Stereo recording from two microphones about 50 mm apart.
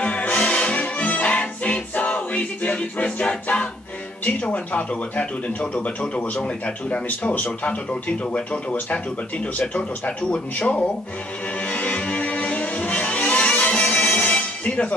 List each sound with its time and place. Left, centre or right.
0.0 s music: left
4.2 s speech: left
11.6 s music: left